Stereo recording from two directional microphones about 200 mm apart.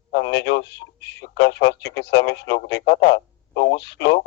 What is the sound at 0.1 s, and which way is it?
Speech, 60° left (ahead or behind).